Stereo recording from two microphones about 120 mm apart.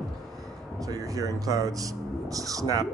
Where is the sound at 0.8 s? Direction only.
30° right (ahead or behind).